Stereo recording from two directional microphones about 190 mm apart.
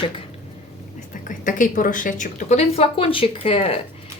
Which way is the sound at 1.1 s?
45° left (ahead or behind).